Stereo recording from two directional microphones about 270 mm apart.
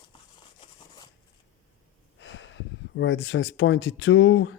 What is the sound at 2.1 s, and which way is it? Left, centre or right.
Speech, left.